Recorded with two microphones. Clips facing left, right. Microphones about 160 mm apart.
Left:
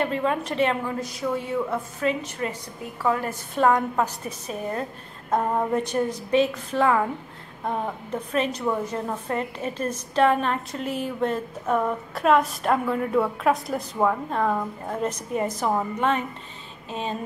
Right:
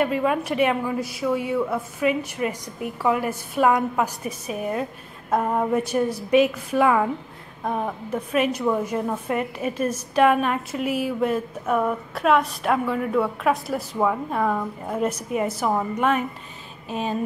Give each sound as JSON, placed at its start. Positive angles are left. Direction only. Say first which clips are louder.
{"t": 0.0, "sound": "a woman's voice", "louder": "right 3 dB", "side_deg": -10}